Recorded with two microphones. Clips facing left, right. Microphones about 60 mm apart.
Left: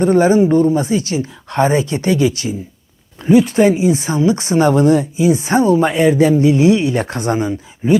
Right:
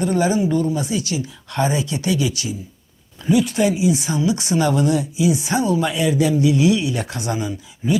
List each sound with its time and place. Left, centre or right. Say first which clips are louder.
0.0 s speech: left 7 dB; left